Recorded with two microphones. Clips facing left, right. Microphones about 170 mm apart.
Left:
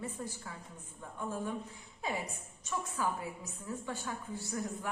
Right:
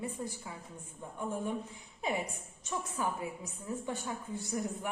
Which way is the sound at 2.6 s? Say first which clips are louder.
Even; 20° right (ahead or behind).